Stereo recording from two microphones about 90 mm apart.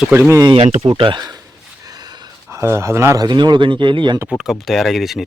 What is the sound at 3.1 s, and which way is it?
Speech, 50° right (ahead or behind).